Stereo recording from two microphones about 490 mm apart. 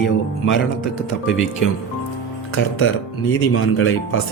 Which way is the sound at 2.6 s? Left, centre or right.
Left.